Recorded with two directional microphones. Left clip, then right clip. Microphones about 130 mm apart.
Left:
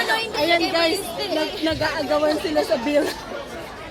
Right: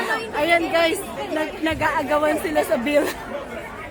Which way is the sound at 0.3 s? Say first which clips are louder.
Right 2 dB; 25° right (ahead or behind).